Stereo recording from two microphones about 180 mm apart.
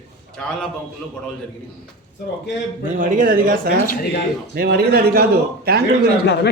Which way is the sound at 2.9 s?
45° right (ahead or behind).